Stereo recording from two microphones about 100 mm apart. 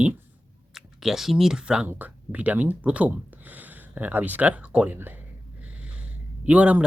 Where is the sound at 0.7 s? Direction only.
5° right (ahead or behind); by 5.2 s 20° right (ahead or behind).